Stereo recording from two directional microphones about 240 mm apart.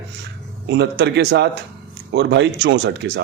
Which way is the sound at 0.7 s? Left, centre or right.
Right.